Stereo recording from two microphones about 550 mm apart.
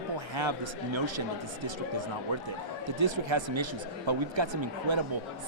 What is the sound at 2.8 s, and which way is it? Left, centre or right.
A man's voice, right.